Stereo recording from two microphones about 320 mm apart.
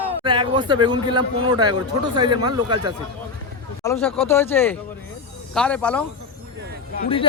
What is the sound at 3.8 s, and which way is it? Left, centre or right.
A man's voice, centre.